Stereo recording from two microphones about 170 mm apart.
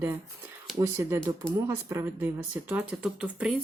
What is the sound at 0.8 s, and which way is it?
Speech, 15° right (ahead or behind).